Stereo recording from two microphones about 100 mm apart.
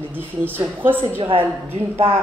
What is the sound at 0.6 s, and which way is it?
Speech, 20° right (ahead or behind).